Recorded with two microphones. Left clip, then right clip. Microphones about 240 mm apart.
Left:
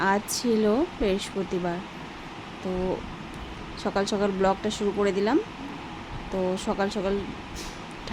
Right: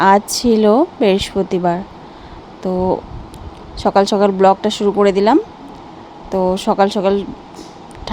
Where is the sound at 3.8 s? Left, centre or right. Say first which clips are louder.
Right 14 dB; right.